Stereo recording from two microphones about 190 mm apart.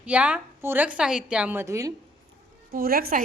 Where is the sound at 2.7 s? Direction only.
50° right (ahead or behind).